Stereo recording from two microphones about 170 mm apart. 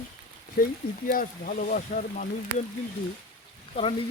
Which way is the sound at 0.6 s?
60° left (ahead or behind).